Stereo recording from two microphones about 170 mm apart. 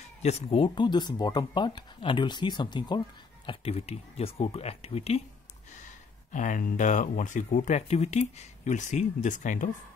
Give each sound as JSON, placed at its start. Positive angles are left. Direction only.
{"t": 0.2, "sound": "speech", "side_deg": 40}
{"t": 3.4, "sound": "speech", "side_deg": 35}
{"t": 5.7, "sound": "speech", "side_deg": 45}